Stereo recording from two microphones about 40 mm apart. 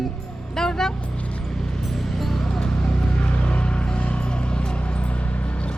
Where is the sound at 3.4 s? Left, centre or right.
Left.